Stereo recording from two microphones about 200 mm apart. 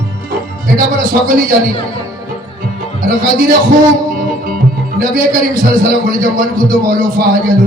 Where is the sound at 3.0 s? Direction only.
45° right (ahead or behind).